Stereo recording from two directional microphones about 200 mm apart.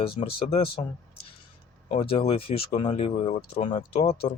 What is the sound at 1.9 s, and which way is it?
Speech, 25° left (ahead or behind).